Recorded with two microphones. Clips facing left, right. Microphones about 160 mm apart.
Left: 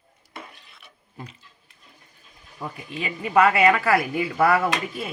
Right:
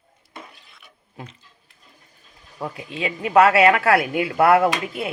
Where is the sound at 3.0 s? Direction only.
90° right; by 5.0 s 60° right (ahead or behind).